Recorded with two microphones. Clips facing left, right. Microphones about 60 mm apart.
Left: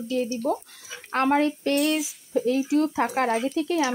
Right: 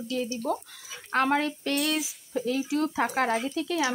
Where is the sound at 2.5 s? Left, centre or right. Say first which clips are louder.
Left 5 dB; left.